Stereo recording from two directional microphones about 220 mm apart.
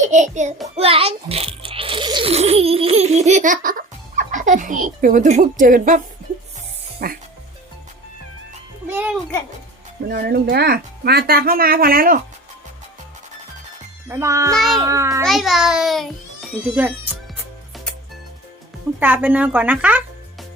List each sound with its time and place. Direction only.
0.1 s a child's voice: 30° right (ahead or behind)
0.8 s rattle: 25° right (ahead or behind)
7.0 s speech: 45° right (ahead or behind)
8.9 s a child's voice: 10° right (ahead or behind)
10.1 s speech: 45° right (ahead or behind)
14.1 s speech: 15° right (ahead or behind)
14.5 s a child's voice: centre (ahead or behind)
14.8 s speech: 15° right (ahead or behind)
15.2 s a child's voice: centre (ahead or behind)
18.9 s speech: 5° right (ahead or behind)